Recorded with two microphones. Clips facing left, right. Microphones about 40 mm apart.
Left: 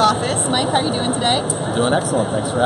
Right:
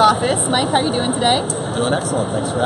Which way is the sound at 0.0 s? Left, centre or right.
Centre.